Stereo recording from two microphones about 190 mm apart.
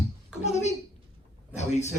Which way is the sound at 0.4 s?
35° left (ahead or behind).